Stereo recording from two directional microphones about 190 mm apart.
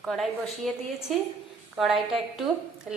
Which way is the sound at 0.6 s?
Centre (ahead or behind).